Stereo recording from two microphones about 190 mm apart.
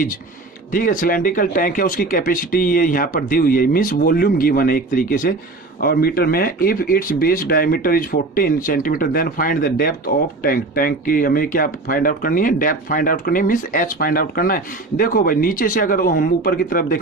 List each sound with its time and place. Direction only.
0.7 s speech: 45° left (ahead or behind)